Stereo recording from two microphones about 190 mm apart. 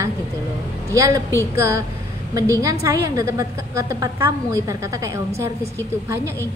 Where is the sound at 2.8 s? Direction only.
15° right (ahead or behind).